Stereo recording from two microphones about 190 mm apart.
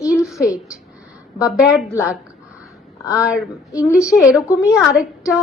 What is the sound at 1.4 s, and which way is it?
Speech, 5° right (ahead or behind).